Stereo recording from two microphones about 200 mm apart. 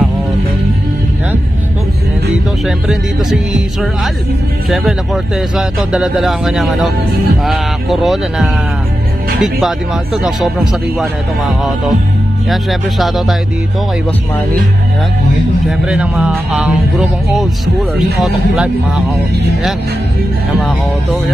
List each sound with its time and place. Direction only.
2.6 s speech: centre (ahead or behind)
15.8 s speech: 5° right (ahead or behind)
17.9 s speech: centre (ahead or behind)